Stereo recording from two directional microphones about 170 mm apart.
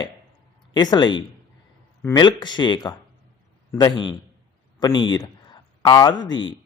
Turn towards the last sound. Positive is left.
turn(degrees=25)  # may be behind; listen again after turning